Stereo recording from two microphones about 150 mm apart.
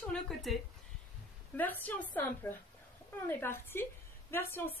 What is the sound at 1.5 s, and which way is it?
A woman's voice, 10° left (ahead or behind).